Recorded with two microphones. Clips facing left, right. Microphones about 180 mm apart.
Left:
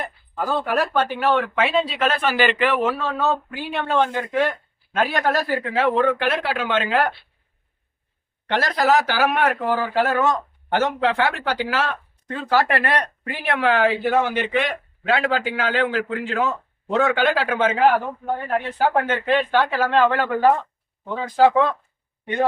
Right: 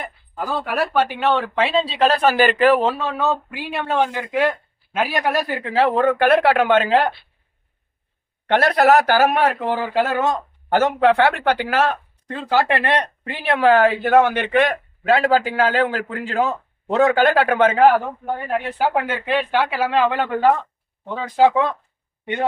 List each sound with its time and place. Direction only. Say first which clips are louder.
0.0 s a sound: left 2 dB; 5° right (ahead or behind)
1.2 s speech: right 1 dB; 25° right (ahead or behind)
3.0 s speech: right 1 dB; 15° right (ahead or behind)
3.6 s speech: even; 5° right (ahead or behind)
5.6 s speech: right 3 dB; 35° right (ahead or behind); by 6.8 s 55° right (ahead or behind)
6.8 s speech: right 3 dB; 30° right (ahead or behind)
8.4 s speech: right 5 dB; 60° right (ahead or behind); by 10.2 s 25° right (ahead or behind)
10.7 s speech: right 5 dB; 50° right (ahead or behind)
11.9 s speech: right 4 dB; 25° right (ahead or behind); by 17.9 s 45° right (ahead or behind)
18.8 s speech: left 2 dB; 10° right (ahead or behind)